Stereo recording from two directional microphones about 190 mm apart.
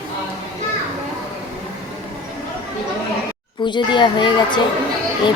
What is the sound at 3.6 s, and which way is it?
Speech, 25° left (ahead or behind).